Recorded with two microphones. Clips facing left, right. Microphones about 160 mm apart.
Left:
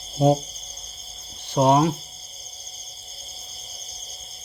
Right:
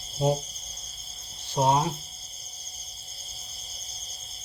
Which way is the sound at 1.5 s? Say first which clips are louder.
Left 6 dB; 70° left (ahead or behind).